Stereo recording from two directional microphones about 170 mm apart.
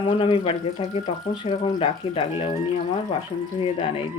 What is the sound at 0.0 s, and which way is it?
Speech, 30° left (ahead or behind).